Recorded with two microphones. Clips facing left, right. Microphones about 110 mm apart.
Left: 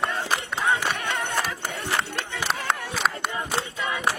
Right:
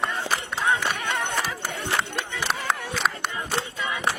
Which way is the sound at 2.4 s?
Centre (ahead or behind).